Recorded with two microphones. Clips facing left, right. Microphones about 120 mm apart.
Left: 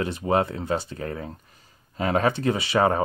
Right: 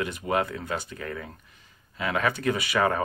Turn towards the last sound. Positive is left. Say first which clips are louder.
# left 3 dB
turn(degrees=30)  # may be behind; listen again after turning